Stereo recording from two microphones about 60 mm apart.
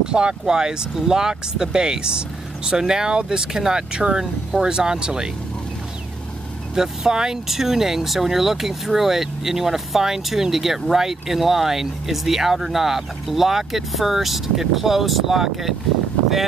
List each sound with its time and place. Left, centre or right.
0.1 s speech: centre
6.7 s speech: centre